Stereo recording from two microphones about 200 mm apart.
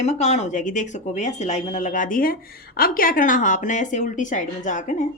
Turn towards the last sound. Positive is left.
turn(degrees=40)  # may be behind; listen again after turning